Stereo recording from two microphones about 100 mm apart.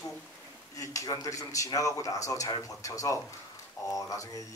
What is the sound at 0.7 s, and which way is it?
Speech, 35° left (ahead or behind).